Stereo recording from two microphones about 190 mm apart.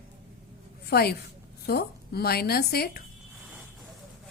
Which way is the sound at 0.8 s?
55° left (ahead or behind).